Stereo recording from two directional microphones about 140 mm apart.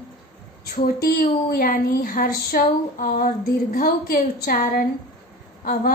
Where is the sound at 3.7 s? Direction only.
90° left.